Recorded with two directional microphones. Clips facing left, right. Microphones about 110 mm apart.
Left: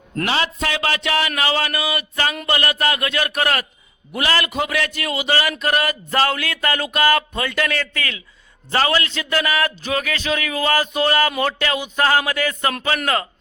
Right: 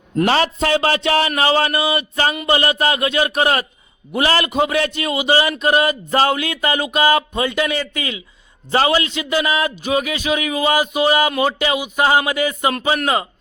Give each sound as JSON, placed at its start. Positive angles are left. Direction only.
{"t": 0.3, "sound": "a man's voice", "side_deg": -40}